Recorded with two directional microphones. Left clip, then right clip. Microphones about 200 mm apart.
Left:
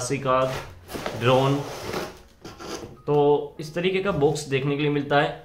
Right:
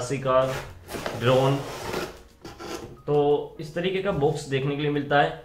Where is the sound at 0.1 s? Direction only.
25° left (ahead or behind).